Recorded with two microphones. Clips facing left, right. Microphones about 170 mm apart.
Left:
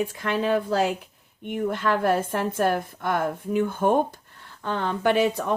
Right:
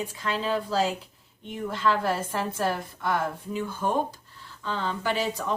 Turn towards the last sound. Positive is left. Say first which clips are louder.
# left 6 dB
turn(degrees=55)  # may be behind; listen again after turning